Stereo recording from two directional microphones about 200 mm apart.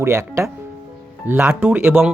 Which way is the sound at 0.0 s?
15° right (ahead or behind).